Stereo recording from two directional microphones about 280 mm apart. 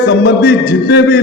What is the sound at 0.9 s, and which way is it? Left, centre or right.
Speech, left.